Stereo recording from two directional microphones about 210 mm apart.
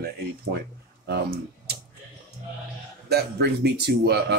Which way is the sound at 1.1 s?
50° right (ahead or behind).